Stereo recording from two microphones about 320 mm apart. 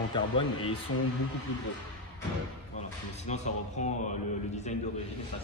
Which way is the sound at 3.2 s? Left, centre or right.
Left.